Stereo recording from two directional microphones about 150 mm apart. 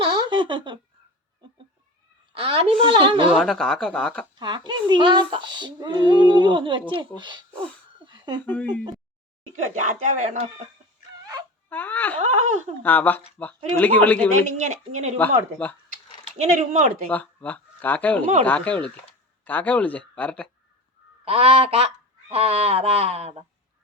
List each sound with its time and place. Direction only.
0.0 s a sound: 35° right (ahead or behind)
2.3 s speech: 40° right (ahead or behind)
3.3 s speech: 5° left (ahead or behind)
4.4 s speech: 30° right (ahead or behind)
7.9 s a sound: 30° right (ahead or behind)
9.7 s speech: 55° right (ahead or behind)
11.7 s speech: 10° left (ahead or behind)
12.2 s speech: 50° right (ahead or behind)
12.8 s speech: 10° left (ahead or behind)
14.4 s speech: 50° right (ahead or behind)
15.2 s speech: 10° left (ahead or behind)
16.4 s speech: 50° right (ahead or behind)
17.1 s speech: 10° left (ahead or behind)
21.2 s speech: 40° right (ahead or behind)